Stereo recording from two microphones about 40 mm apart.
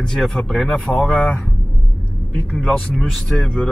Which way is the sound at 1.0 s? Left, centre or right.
Left.